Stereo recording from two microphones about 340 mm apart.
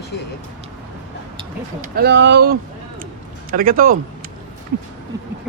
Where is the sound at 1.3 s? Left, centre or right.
Right.